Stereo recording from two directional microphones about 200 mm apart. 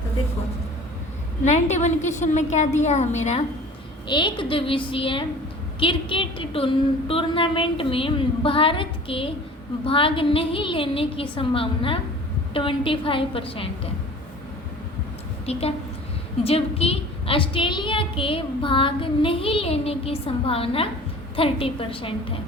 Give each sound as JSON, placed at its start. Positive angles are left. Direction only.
{"t": 1.5, "sound": "a woman's voice", "side_deg": 35}
{"t": 4.1, "sound": "a woman's voice", "side_deg": 25}
{"t": 15.5, "sound": "a woman's voice", "side_deg": 30}